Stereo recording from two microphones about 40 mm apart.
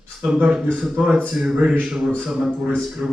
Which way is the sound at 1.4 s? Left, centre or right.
Right.